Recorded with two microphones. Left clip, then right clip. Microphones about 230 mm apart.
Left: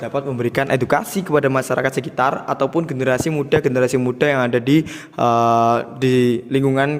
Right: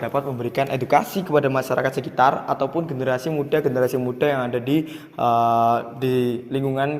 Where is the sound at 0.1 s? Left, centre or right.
Left.